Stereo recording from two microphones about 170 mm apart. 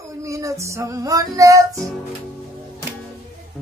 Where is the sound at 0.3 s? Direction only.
20° right (ahead or behind).